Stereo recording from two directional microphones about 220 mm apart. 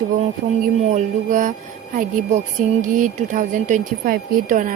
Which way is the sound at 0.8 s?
30° right (ahead or behind).